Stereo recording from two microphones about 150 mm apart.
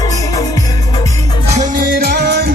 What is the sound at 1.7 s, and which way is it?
Music, 85° right.